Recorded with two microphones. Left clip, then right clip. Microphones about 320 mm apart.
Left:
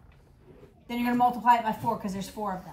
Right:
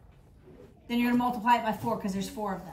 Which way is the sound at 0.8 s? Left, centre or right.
Centre.